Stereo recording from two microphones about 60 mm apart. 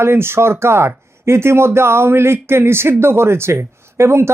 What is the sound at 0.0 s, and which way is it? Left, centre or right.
Speech, right.